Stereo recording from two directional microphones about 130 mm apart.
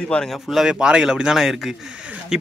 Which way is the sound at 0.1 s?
5° left (ahead or behind).